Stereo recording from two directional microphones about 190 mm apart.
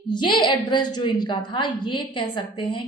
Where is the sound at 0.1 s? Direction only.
25° left (ahead or behind).